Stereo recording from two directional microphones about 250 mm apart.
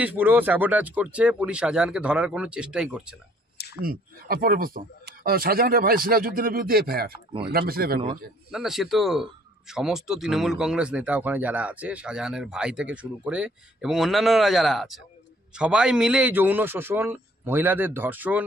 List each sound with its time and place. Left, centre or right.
0.0 s speech: centre
3.8 s speech: right
8.5 s a man's voice: centre